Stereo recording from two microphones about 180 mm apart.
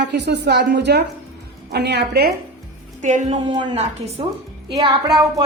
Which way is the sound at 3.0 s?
45° right (ahead or behind).